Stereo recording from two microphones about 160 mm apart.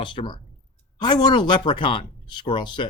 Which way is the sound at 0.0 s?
30° left (ahead or behind).